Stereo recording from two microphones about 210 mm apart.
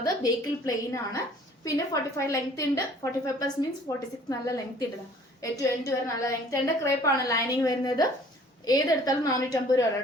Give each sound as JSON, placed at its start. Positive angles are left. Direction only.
{"t": 0.0, "sound": "a woman's voice", "side_deg": 15}